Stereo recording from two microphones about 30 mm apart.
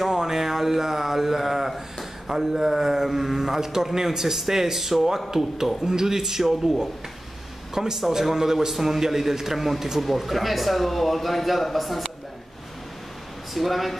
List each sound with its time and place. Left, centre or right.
0.1 s a sound: centre
2.2 s a man's voice: centre
7.7 s a man's voice: centre
13.6 s speech: centre